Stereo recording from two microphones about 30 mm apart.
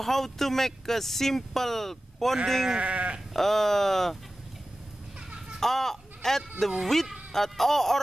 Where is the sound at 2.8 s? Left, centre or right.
Right.